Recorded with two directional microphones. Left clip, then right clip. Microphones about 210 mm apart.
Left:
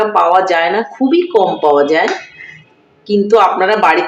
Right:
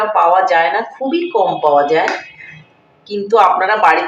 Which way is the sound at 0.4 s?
50° left (ahead or behind).